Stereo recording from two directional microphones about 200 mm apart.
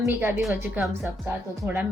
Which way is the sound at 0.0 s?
10° right (ahead or behind).